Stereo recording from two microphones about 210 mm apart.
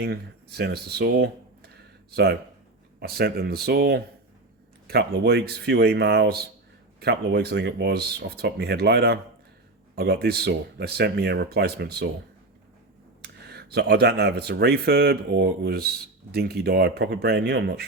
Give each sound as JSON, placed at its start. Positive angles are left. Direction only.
{"t": 0.0, "sound": "speech", "side_deg": -50}
{"t": 13.2, "sound": "speech", "side_deg": -50}